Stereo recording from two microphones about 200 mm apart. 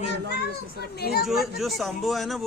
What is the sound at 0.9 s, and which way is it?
Speech, 50° left (ahead or behind).